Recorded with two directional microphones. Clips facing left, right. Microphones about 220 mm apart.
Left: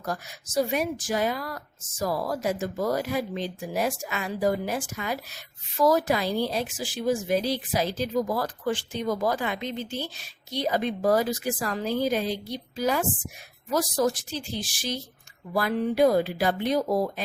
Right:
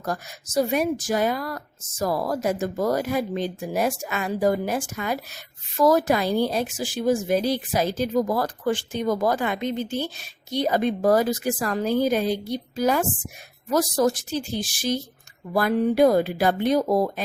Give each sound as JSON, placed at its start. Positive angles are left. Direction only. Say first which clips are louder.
{"t": 0.0, "sound": "speech", "louder": "right 3 dB", "side_deg": -45}